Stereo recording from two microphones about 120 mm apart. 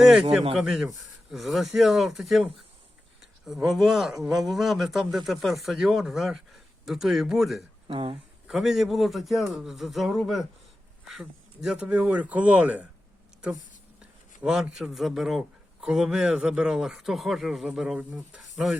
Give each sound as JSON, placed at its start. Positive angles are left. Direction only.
{"t": 0.0, "sound": "speech", "side_deg": -5}
{"t": 7.9, "sound": "speech", "side_deg": -45}
{"t": 8.4, "sound": "speech", "side_deg": -5}
{"t": 14.4, "sound": "speech", "side_deg": -5}